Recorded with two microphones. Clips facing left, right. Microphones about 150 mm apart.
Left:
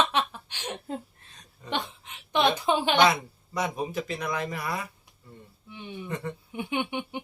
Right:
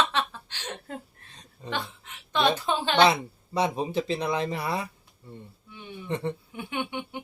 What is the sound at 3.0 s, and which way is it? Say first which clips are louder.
Speech: right 1 dB; 30° right (ahead or behind).